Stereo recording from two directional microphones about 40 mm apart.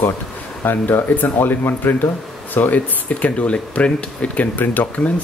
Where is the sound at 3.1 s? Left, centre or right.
Left.